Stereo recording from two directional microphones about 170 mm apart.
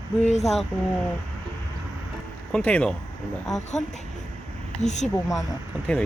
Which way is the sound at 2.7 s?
10° left (ahead or behind).